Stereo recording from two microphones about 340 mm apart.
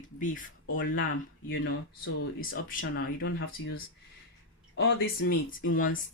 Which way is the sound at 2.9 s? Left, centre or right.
Left.